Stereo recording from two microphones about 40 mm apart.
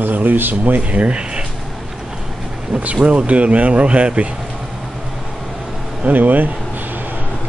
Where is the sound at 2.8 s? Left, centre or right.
Right.